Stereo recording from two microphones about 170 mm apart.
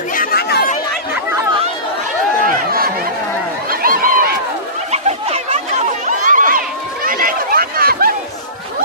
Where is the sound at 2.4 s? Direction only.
55° right (ahead or behind).